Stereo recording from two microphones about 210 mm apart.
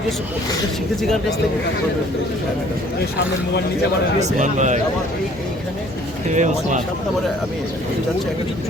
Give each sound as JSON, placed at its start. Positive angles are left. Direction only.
{"t": 4.2, "sound": "a man's voice", "side_deg": -35}
{"t": 6.2, "sound": "a man's voice", "side_deg": -35}